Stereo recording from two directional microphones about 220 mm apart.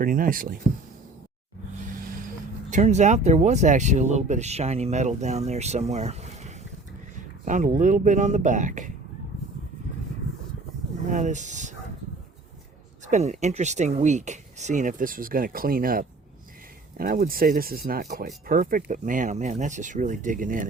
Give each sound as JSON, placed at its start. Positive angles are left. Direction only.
{"t": 0.0, "sound": "speech", "side_deg": -40}
{"t": 2.0, "sound": "a sound", "side_deg": -40}
{"t": 2.6, "sound": "speech", "side_deg": -30}
{"t": 11.1, "sound": "speech", "side_deg": -35}
{"t": 13.1, "sound": "speech", "side_deg": -30}